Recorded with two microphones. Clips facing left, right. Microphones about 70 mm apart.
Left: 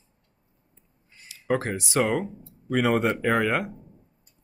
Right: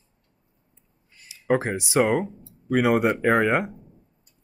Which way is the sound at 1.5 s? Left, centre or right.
Right.